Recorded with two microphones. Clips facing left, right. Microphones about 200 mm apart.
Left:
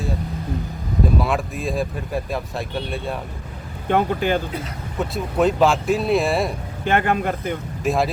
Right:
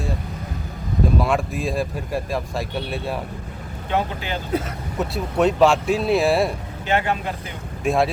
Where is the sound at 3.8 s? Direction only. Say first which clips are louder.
Left 5 dB; 50° left (ahead or behind).